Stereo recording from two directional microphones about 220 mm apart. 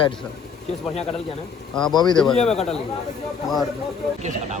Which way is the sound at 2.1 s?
5° left (ahead or behind).